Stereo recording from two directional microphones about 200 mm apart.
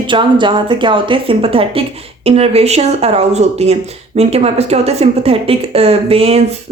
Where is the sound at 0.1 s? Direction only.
25° right (ahead or behind).